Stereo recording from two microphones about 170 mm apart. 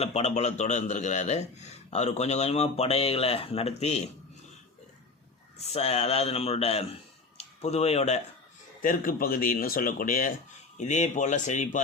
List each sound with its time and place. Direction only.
0.0 s a man's voice: 40° left (ahead or behind)
5.5 s a man's voice: 40° left (ahead or behind)
8.8 s speech: 55° left (ahead or behind)